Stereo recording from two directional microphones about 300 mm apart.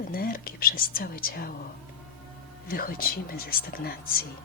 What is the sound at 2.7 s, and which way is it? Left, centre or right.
A woman's voice, left.